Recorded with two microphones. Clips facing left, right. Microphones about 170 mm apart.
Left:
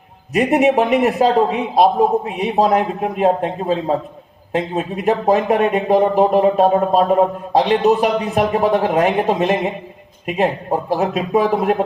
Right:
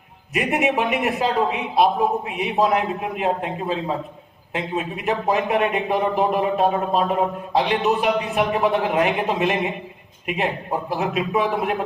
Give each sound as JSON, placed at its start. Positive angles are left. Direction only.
{"t": 0.3, "sound": "speech", "side_deg": 40}